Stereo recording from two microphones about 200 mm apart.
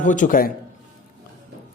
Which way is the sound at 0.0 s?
40° left (ahead or behind).